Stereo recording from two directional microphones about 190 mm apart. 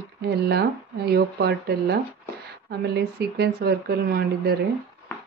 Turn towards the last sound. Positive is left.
turn(degrees=-55)  # may be behind; listen again after turning